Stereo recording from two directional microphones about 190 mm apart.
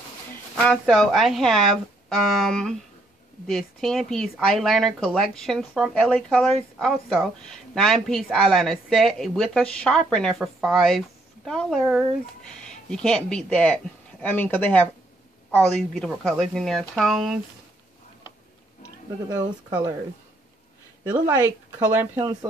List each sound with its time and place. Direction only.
0.6 s a woman's voice: 5° left (ahead or behind)
19.2 s speech: 20° right (ahead or behind)
21.1 s speech: 10° right (ahead or behind)